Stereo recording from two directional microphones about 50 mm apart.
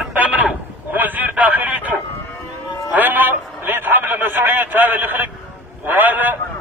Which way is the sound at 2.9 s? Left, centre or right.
Right.